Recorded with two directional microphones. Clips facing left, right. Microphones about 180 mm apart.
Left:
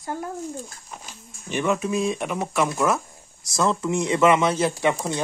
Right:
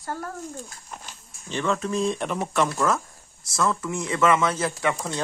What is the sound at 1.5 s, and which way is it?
Speech, 15° left (ahead or behind).